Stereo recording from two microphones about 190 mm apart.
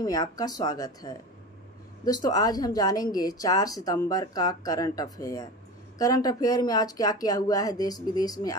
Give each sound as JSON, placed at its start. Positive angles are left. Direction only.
{"t": 0.0, "sound": "a woman's voice", "side_deg": 20}
{"t": 2.2, "sound": "a woman's voice", "side_deg": 20}